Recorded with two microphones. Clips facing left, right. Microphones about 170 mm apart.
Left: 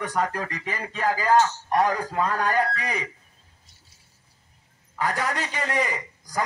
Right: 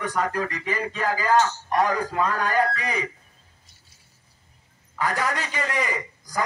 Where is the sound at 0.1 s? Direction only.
35° left (ahead or behind).